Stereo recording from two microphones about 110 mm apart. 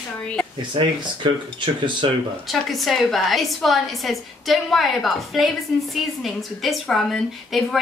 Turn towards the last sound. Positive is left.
turn(degrees=0)  # may be behind; listen again after turning